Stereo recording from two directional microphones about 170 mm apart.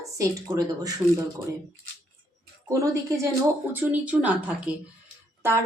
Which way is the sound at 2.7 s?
15° right (ahead or behind).